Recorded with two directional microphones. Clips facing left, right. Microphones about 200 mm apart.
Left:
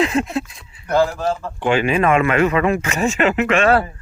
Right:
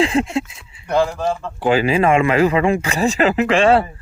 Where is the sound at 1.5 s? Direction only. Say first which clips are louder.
Right 2 dB; 35° right (ahead or behind).